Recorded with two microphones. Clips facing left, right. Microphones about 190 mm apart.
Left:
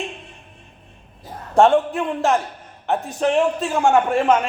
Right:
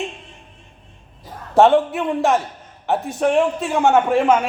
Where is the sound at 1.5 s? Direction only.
5° right (ahead or behind).